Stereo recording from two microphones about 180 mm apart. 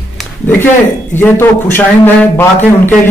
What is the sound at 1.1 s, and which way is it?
A man's voice, 10° left (ahead or behind).